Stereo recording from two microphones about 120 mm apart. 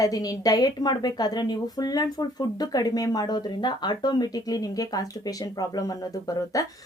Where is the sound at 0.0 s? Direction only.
30° left (ahead or behind).